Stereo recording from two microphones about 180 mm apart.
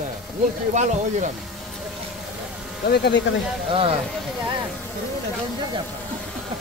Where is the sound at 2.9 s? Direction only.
70° left (ahead or behind).